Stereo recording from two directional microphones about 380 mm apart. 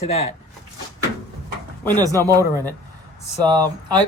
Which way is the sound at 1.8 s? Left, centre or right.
Centre.